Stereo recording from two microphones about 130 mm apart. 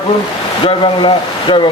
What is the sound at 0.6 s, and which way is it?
Speech, 40° left (ahead or behind).